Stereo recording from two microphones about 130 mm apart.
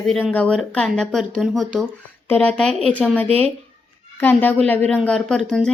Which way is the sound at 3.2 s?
50° right (ahead or behind).